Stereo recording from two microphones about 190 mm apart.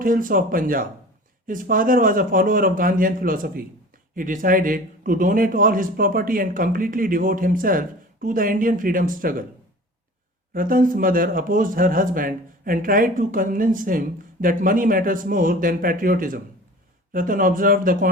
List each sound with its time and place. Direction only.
0.0 s speech: 45° right (ahead or behind)
10.5 s speech: 45° right (ahead or behind)